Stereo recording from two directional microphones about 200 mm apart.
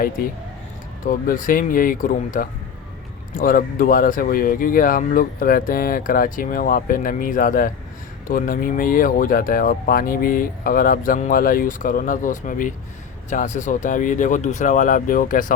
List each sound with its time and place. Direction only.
1.0 s speech: 45° left (ahead or behind)